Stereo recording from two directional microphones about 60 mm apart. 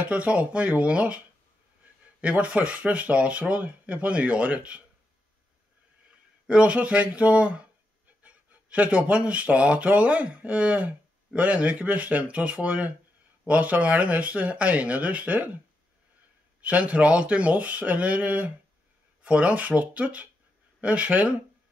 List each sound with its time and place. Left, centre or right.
0.0 s speech: right
2.2 s speech: right
6.4 s speech: centre
16.6 s speech: right